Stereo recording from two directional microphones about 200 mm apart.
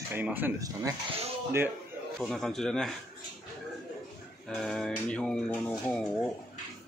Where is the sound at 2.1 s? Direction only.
Centre (ahead or behind).